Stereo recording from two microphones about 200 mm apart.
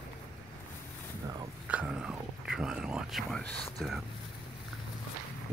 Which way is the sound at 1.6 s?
5° right (ahead or behind).